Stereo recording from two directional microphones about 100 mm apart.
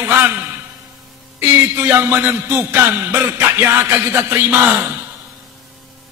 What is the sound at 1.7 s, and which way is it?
A man's voice, 20° right (ahead or behind).